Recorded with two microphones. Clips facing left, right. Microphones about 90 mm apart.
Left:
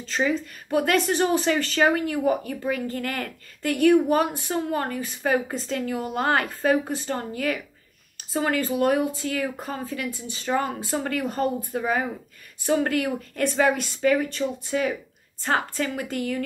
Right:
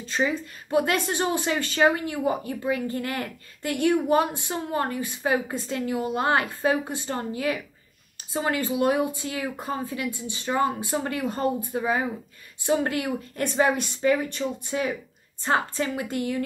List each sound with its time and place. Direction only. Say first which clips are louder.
0.0 s a woman's voice: left 1 dB; 15° right (ahead or behind)